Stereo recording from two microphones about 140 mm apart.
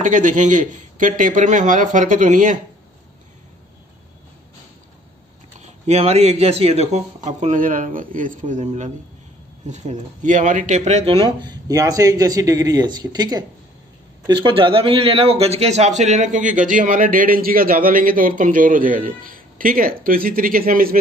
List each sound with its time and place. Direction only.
0.0 s speech: 65° right (ahead or behind)
5.6 s speech: 50° right (ahead or behind)
11.1 s a man's voice: 30° right (ahead or behind); by 21.0 s 90° right